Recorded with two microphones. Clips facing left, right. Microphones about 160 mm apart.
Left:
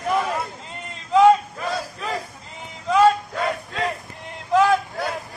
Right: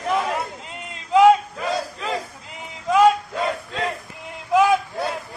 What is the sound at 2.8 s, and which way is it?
Music, 10° right (ahead or behind).